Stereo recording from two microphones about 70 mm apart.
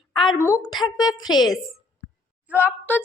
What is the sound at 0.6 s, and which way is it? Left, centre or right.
Speech, left.